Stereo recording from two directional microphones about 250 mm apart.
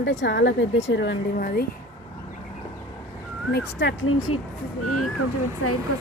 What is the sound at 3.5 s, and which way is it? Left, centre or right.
Speech, left.